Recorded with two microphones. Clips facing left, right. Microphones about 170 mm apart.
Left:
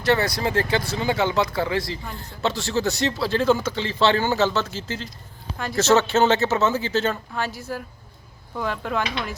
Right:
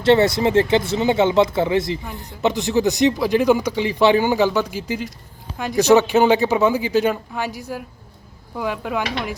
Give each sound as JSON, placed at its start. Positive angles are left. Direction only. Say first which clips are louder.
{"t": 0.0, "sound": "speech", "louder": "right 7 dB", "side_deg": -25}